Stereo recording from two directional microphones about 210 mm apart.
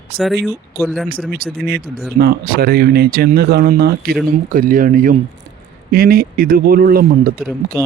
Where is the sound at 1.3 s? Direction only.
45° right (ahead or behind).